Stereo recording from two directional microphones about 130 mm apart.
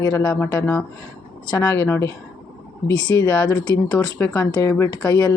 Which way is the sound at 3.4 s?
30° left (ahead or behind).